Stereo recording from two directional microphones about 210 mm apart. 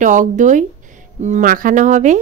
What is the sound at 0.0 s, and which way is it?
Speech, 35° right (ahead or behind).